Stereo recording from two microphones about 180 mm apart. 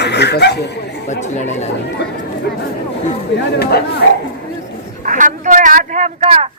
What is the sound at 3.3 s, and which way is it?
Speech, 70° left (ahead or behind).